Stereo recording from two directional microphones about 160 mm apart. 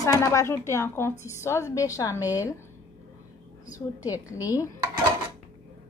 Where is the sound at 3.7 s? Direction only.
20° left (ahead or behind).